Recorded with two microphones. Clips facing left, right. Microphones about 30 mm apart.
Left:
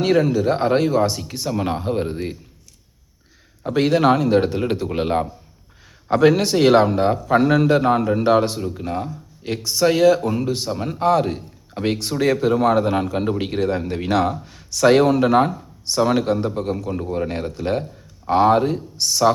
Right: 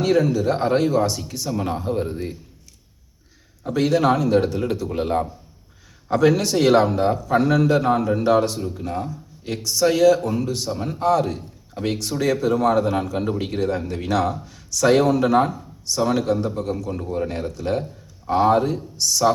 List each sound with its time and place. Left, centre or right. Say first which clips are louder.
0.0 s speech: left 1 dB; centre
1.3 s a man's voice: left 2 dB; left
3.6 s a man's voice: left 2 dB; left
6.1 s a man's voice: left 2 dB; left